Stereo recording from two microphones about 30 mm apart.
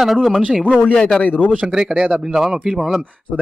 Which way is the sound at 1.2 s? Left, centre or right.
Left.